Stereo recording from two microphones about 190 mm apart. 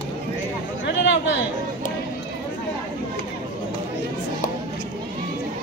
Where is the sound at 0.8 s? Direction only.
70° left (ahead or behind).